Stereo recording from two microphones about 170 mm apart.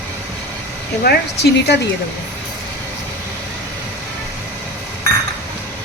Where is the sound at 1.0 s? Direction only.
70° left (ahead or behind).